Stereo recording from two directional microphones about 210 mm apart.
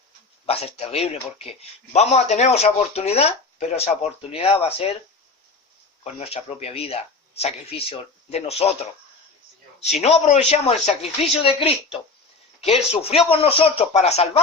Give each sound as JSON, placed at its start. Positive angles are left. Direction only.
{"t": 0.4, "sound": "speech", "side_deg": 30}
{"t": 6.1, "sound": "speech", "side_deg": 30}
{"t": 9.8, "sound": "speech", "side_deg": 30}